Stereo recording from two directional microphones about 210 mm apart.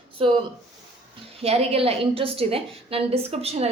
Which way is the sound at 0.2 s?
25° right (ahead or behind).